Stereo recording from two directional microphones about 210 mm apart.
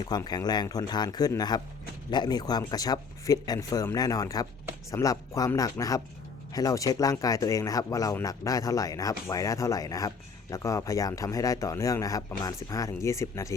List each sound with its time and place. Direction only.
0.0 s speech: 20° left (ahead or behind)